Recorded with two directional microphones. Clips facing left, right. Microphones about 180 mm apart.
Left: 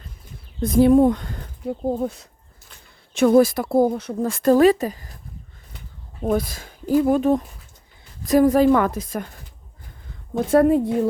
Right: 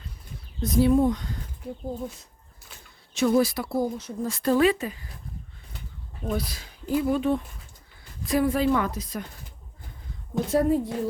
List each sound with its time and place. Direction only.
0.6 s speech: 50° left (ahead or behind)
6.3 s speech: 50° left (ahead or behind)
10.5 s speech: 60° left (ahead or behind)